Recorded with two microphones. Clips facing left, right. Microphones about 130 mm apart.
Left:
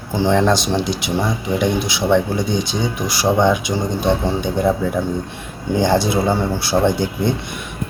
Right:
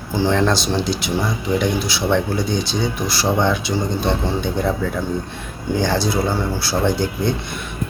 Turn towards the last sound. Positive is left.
turn(degrees=20)  # may be behind; listen again after turning